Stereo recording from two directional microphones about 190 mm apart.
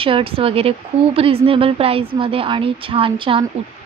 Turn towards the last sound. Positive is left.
turn(degrees=-25)  # may be behind; listen again after turning